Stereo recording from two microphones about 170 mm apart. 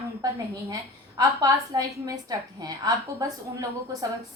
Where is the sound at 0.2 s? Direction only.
20° right (ahead or behind).